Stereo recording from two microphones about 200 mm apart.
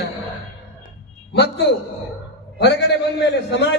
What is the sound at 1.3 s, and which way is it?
A man's voice, 55° left (ahead or behind).